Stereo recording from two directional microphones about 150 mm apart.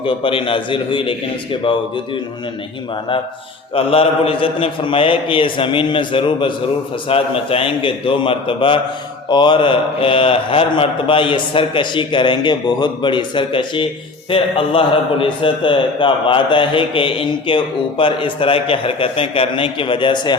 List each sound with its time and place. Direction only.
0.0 s a man's voice: 35° left (ahead or behind)
3.8 s a man's voice: 40° left (ahead or behind)